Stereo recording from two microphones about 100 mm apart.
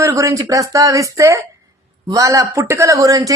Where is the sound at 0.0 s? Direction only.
30° right (ahead or behind).